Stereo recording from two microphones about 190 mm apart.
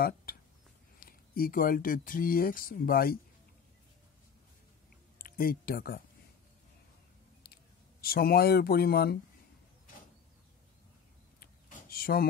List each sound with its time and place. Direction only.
0.0 s a sound: 50° left (ahead or behind)
0.9 s speech: 50° left (ahead or behind)
5.2 s speech: 50° left (ahead or behind)
7.4 s speech: 55° left (ahead or behind)
11.9 s speech: 50° left (ahead or behind)